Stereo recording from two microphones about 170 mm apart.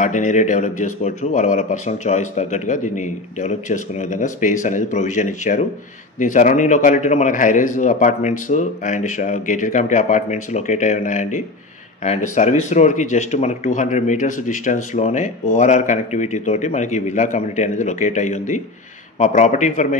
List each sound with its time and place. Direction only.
0.0 s speech: 45° left (ahead or behind)